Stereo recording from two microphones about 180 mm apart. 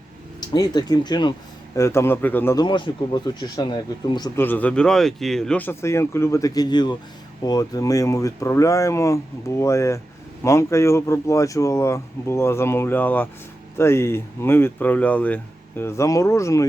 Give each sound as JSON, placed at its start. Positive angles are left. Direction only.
{"t": 0.3, "sound": "speech", "side_deg": 20}
{"t": 2.6, "sound": "speech", "side_deg": 25}
{"t": 4.4, "sound": "speech", "side_deg": 10}